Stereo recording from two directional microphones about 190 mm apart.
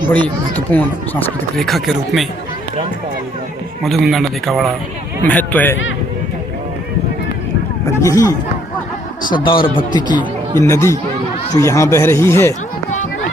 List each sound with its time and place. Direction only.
0.7 s speech: 10° left (ahead or behind)
3.8 s speech: centre (ahead or behind)
8.0 s speech: 15° left (ahead or behind)
9.4 s speech: 25° left (ahead or behind)